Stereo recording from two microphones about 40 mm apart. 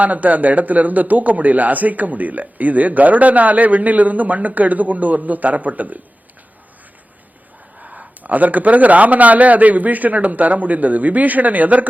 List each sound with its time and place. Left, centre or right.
0.0 s a man's voice: right
7.8 s a man's voice: right